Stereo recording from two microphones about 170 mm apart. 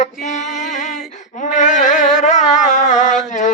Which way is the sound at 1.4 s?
45° left (ahead or behind).